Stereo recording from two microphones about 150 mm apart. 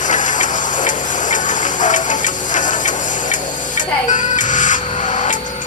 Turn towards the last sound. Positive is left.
turn(degrees=55)  # may be behind; listen again after turning